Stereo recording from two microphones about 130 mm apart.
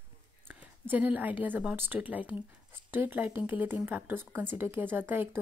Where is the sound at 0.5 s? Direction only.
15° right (ahead or behind).